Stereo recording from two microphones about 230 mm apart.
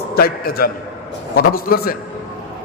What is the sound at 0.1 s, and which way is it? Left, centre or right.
A man's voice, left.